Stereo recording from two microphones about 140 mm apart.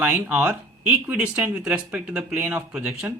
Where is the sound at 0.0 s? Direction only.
10° right (ahead or behind).